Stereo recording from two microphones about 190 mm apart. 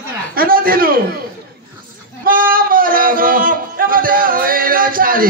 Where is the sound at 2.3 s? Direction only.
50° right (ahead or behind).